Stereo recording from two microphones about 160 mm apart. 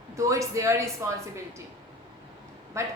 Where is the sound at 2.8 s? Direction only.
15° right (ahead or behind).